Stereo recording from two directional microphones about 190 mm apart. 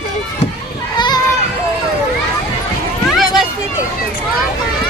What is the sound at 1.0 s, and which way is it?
Children playing, 20° left (ahead or behind).